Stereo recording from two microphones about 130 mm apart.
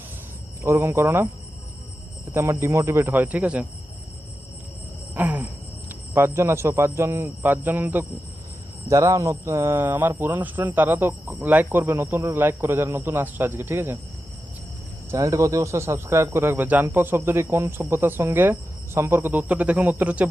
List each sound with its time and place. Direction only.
0.6 s speech: 20° right (ahead or behind)
2.3 s speech: 20° right (ahead or behind)
5.1 s cricket: 15° right (ahead or behind)
5.9 s speech: 15° right (ahead or behind)
15.1 s speech: 25° right (ahead or behind)